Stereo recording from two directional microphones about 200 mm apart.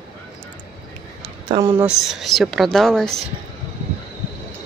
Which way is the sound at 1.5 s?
15° right (ahead or behind).